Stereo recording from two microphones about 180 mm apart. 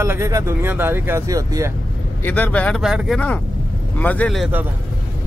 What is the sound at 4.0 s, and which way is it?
Speech, 10° left (ahead or behind).